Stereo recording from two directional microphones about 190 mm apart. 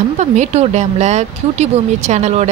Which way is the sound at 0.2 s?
35° right (ahead or behind).